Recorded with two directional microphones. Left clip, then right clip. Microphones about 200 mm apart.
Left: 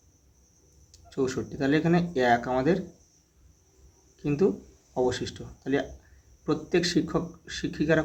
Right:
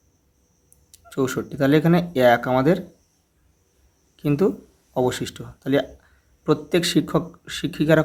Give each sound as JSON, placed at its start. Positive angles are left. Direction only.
{"t": 1.1, "sound": "speech", "side_deg": -45}
{"t": 4.2, "sound": "speech", "side_deg": -45}